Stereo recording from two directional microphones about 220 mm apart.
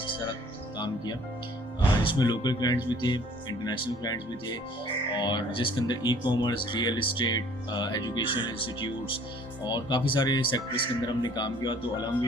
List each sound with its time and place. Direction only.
2.0 s speech: 20° left (ahead or behind)